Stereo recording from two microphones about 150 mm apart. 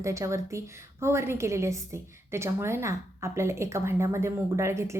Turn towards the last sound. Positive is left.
turn(degrees=-20)  # may be behind; listen again after turning